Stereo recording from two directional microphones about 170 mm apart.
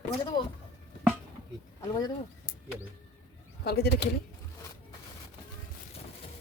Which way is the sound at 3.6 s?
70° left (ahead or behind).